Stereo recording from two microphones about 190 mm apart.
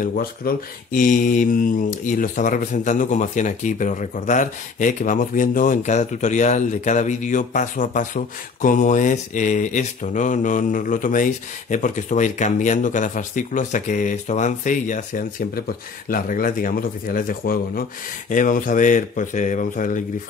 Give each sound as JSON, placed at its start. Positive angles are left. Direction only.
{"t": 0.0, "sound": "speech", "side_deg": 50}